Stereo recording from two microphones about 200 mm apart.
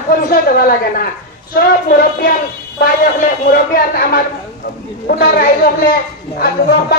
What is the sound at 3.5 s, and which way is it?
A woman's voice, 50° left (ahead or behind).